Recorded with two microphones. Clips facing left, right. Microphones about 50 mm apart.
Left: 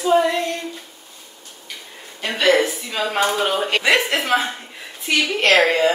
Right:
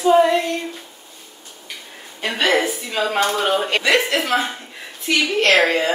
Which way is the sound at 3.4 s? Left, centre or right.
Centre.